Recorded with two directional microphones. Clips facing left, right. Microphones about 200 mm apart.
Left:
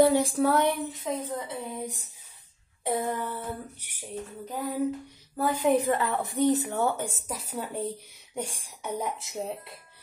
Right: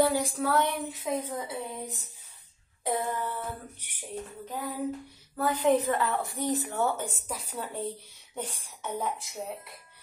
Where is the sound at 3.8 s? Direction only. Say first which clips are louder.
Left 2 dB; 10° left (ahead or behind).